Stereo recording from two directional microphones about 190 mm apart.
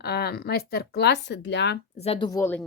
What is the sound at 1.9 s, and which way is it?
Speech, 30° left (ahead or behind).